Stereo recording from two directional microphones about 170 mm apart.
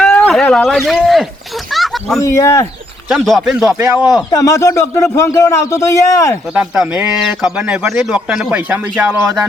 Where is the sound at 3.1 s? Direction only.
Centre (ahead or behind).